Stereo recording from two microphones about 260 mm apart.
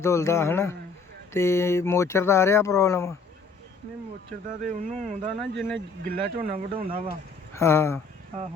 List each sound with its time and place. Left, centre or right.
0.0 s speech: centre
4.7 s speech: right
5.4 s speech: centre
6.4 s speech: right
7.5 s speech: centre